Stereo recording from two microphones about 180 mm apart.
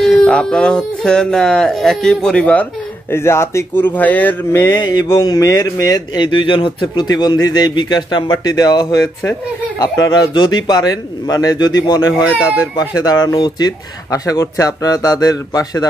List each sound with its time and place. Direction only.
0.0 s speech: 5° left (ahead or behind); by 15.9 s 20° left (ahead or behind)